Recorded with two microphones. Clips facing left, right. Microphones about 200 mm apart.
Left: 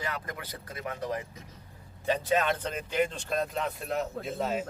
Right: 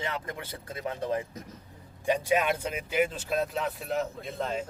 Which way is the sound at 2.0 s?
10° right (ahead or behind).